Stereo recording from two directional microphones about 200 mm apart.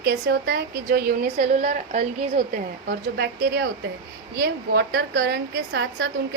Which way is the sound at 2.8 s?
55° right (ahead or behind).